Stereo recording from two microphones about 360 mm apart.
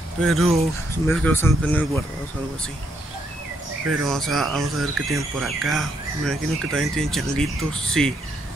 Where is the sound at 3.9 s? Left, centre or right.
Centre.